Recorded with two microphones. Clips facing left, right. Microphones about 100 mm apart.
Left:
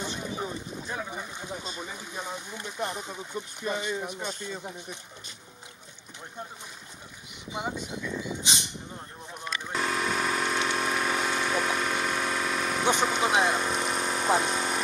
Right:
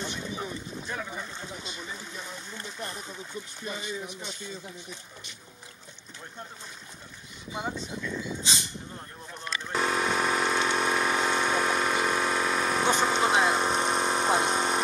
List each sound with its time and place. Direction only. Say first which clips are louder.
0.8 s boat: even; 15° left (ahead or behind)
1.5 s a sound: left 3 dB; 40° left (ahead or behind)
2.2 s a sound: left 4 dB; 15° left (ahead or behind)
2.8 s speech: left 7 dB; 20° left (ahead or behind)
3.6 s speech: left 5 dB; 50° left (ahead or behind)
7.5 s speech: left 1 dB; 15° left (ahead or behind)
9.7 s pump: right 2 dB; 40° right (ahead or behind)
11.9 s a sound: right 2 dB; 40° right (ahead or behind)
13.0 s vehicle: right 1 dB; 35° right (ahead or behind)
14.3 s speech: left 2 dB; 30° right (ahead or behind)